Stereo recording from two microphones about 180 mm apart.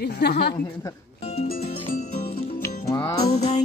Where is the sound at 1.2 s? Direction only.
35° left (ahead or behind).